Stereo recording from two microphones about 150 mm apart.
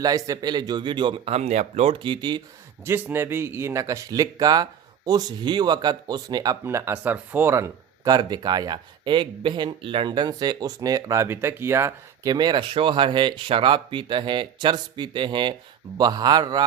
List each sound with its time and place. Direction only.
0.0 s speech: 25° right (ahead or behind)
2.8 s speech: 15° right (ahead or behind)
12.3 s speech: 30° right (ahead or behind)